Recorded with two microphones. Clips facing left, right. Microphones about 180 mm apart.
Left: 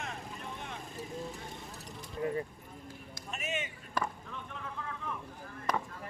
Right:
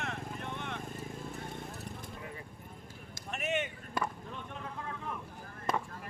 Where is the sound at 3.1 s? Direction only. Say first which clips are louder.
Right 4 dB; 60° right (ahead or behind).